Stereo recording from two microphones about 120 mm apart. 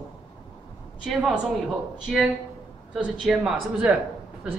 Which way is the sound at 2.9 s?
5° right (ahead or behind).